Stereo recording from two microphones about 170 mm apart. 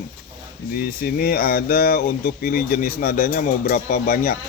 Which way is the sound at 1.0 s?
60° left (ahead or behind).